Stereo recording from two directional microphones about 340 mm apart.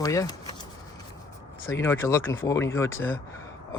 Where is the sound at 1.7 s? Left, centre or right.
Centre.